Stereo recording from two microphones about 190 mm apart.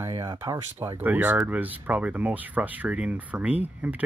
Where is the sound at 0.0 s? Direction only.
20° right (ahead or behind).